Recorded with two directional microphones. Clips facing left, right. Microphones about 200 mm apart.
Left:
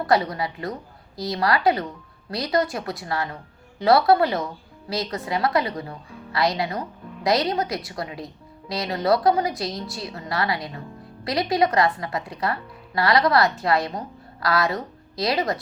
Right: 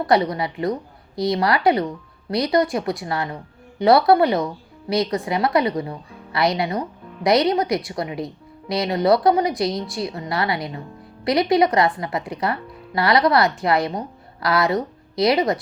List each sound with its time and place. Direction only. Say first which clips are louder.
0.1 s a woman's voice: right 3 dB; 25° right (ahead or behind)